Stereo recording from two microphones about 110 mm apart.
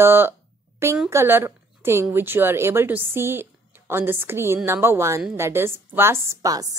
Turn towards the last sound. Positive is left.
turn(degrees=-30)  # may be behind; listen again after turning